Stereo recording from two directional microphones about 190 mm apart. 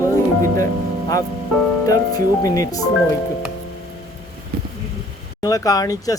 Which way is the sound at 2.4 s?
20° left (ahead or behind).